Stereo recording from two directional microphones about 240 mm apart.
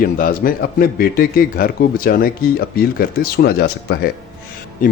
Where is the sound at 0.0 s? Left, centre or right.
Left.